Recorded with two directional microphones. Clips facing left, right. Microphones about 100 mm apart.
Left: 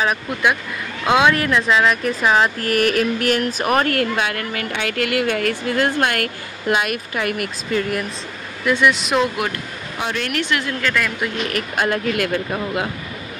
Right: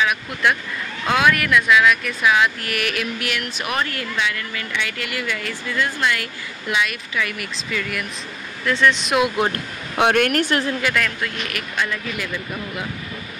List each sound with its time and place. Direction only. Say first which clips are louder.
0.0 s speech: left 1 dB; 35° left (ahead or behind)
1.0 s speech: left 3 dB; 20° left (ahead or behind); by 8.1 s 40° left (ahead or behind)
8.6 s speech: left 2 dB; 10° left (ahead or behind)
9.9 s speech: right 7 dB; 60° right (ahead or behind)
10.8 s speech: left 3 dB; 10° right (ahead or behind)
11.5 s speech: left 7 dB; 45° left (ahead or behind)
12.1 s speech: left 7 dB; 75° left (ahead or behind)